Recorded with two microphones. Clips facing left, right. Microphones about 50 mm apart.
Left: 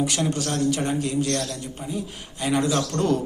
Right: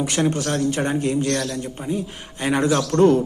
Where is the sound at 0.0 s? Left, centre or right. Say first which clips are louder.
Right 3 dB; right.